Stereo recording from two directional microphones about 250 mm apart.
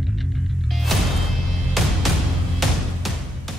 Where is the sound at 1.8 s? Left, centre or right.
Centre.